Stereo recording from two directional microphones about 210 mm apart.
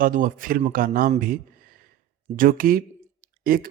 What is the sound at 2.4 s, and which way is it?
Speech, 45° right (ahead or behind).